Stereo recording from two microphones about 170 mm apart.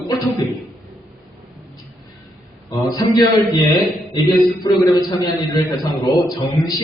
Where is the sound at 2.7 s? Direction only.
20° left (ahead or behind).